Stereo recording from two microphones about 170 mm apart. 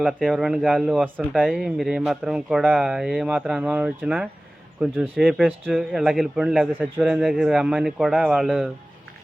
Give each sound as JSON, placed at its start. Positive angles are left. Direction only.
{"t": 0.0, "sound": "a man's voice", "side_deg": -5}
{"t": 5.4, "sound": "a man's voice", "side_deg": -10}